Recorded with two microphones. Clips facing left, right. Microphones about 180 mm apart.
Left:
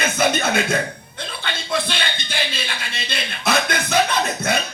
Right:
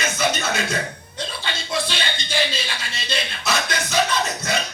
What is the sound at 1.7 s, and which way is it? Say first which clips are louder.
Music: left 2 dB; 55° left (ahead or behind).